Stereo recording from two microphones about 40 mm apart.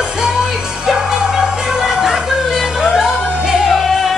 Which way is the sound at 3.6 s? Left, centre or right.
Centre.